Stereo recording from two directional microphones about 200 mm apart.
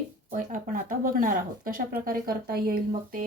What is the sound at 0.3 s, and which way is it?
A woman's voice, 40° right (ahead or behind).